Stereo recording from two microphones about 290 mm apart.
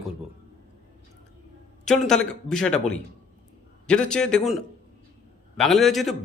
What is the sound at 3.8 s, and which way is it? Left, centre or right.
Speech, centre.